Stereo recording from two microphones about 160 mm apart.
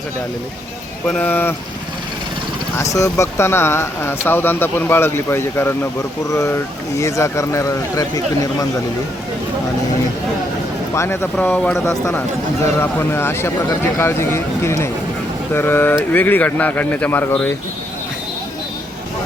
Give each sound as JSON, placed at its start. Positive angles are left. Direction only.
{"t": 1.0, "sound": "speech", "side_deg": 10}
{"t": 2.7, "sound": "speech", "side_deg": 20}
{"t": 6.9, "sound": "speech", "side_deg": 20}
{"t": 10.9, "sound": "speech", "side_deg": 15}